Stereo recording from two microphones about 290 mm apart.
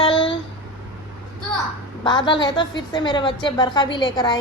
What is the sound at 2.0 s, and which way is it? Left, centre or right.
A woman's voice, centre.